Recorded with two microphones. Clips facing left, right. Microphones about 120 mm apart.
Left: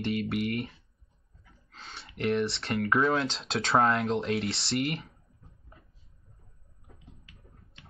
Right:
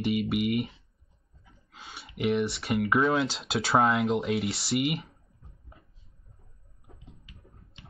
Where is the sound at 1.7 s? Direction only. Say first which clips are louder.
Right 1 dB; 5° right (ahead or behind).